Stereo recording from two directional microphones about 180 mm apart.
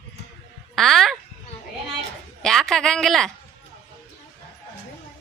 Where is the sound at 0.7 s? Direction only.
Centre (ahead or behind).